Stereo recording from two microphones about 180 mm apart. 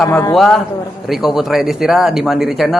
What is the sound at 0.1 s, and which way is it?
Speech, 15° left (ahead or behind).